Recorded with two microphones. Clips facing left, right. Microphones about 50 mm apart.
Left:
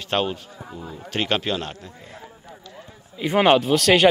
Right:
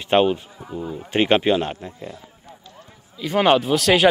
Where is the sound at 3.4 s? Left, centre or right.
Centre.